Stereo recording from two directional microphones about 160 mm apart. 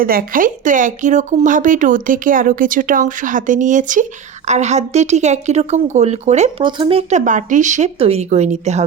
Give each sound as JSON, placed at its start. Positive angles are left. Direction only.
{"t": 0.0, "sound": "a woman's voice", "side_deg": -65}
{"t": 6.7, "sound": "speech", "side_deg": -30}
{"t": 7.1, "sound": "a woman's voice", "side_deg": -50}